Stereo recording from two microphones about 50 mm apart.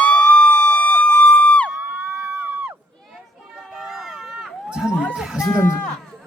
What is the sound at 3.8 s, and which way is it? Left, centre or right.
Run, centre.